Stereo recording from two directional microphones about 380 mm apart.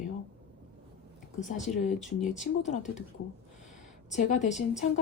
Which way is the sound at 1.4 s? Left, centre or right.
Centre.